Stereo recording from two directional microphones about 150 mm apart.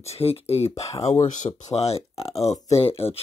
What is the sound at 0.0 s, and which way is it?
Speech, 45° left (ahead or behind).